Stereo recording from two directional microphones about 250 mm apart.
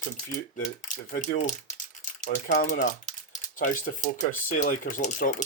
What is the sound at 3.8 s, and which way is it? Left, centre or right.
Speech, left.